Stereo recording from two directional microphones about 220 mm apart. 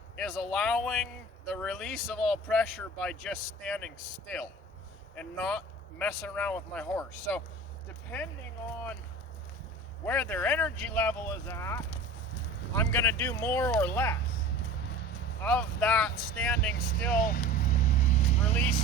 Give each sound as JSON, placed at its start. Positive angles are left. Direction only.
{"t": 0.2, "sound": "speech", "side_deg": 0}
{"t": 10.1, "sound": "speech", "side_deg": 5}
{"t": 15.4, "sound": "speech", "side_deg": 5}
{"t": 16.6, "sound": "speech", "side_deg": 45}
{"t": 17.1, "sound": "vehicle", "side_deg": 40}